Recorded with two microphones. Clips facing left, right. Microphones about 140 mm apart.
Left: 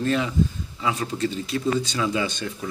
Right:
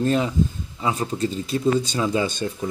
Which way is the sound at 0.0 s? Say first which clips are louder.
Right 2 dB; 35° right (ahead or behind).